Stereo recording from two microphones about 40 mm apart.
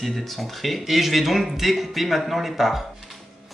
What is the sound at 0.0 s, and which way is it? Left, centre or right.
Speech, centre.